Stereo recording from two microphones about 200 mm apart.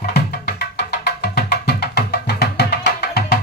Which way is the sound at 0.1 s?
55° left (ahead or behind).